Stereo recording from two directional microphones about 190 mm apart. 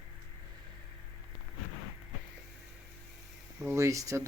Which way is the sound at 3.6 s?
15° right (ahead or behind).